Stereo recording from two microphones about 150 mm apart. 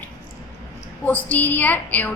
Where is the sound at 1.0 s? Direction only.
10° left (ahead or behind).